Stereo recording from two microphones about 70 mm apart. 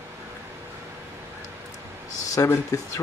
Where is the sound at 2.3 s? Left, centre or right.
Left.